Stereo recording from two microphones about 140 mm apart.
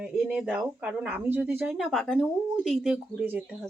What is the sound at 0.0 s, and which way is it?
Speech, 5° right (ahead or behind).